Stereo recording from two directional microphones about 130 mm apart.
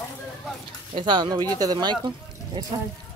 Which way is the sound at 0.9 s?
35° right (ahead or behind).